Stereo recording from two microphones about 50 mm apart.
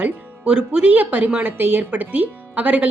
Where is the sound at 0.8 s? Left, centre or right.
Right.